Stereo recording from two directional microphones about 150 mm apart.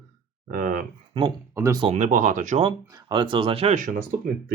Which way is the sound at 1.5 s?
20° right (ahead or behind).